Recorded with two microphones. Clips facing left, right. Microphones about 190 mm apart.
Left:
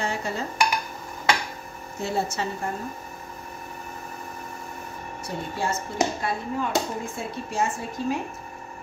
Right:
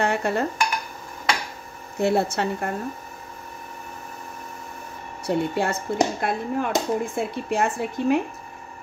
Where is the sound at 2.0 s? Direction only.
65° right (ahead or behind).